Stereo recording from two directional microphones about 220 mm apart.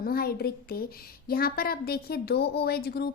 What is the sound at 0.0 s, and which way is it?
A woman's voice, 45° left (ahead or behind).